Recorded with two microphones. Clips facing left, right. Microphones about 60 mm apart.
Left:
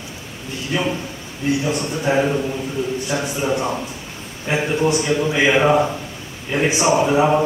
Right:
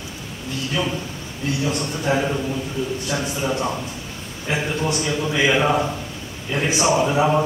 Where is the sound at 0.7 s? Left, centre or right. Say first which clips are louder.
Left 4 dB; left.